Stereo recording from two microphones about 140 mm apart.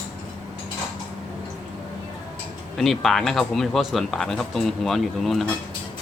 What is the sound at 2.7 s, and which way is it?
Speech, centre (ahead or behind).